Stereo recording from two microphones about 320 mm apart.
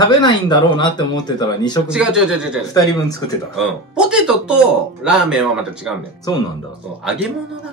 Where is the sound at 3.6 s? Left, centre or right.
Centre.